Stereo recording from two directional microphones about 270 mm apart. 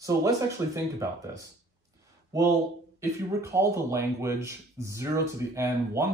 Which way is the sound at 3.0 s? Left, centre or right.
Centre.